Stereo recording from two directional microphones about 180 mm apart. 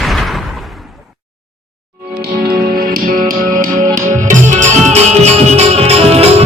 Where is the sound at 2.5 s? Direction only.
55° right (ahead or behind).